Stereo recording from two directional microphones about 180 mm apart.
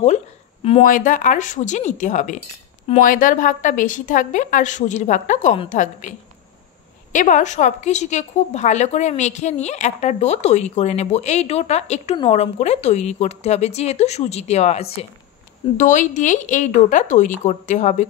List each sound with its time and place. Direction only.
0.8 s a woman's voice: 45° left (ahead or behind)
7.1 s a woman's voice: 45° left (ahead or behind)